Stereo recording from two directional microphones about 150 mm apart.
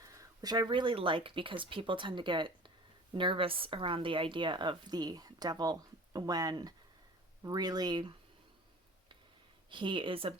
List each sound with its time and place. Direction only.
0.0 s speech: 20° right (ahead or behind)
9.6 s speech: 35° right (ahead or behind)